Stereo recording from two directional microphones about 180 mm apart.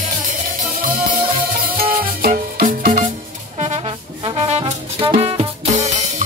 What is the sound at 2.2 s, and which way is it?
Music, 55° right (ahead or behind).